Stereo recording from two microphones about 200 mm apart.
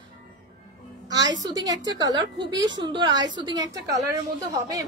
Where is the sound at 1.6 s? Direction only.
20° right (ahead or behind).